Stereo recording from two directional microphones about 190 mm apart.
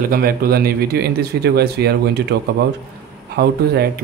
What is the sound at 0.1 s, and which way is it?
Speech, 50° right (ahead or behind).